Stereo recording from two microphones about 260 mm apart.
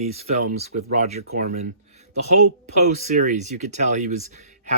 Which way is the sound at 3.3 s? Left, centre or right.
Right.